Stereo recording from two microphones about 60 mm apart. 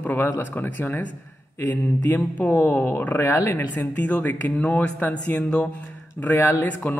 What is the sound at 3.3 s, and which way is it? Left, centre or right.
Speech, left.